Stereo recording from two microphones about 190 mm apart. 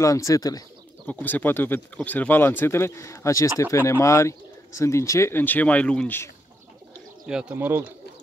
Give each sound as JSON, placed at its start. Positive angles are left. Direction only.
{"t": 0.0, "sound": "speech", "side_deg": 15}
{"t": 7.2, "sound": "speech", "side_deg": -5}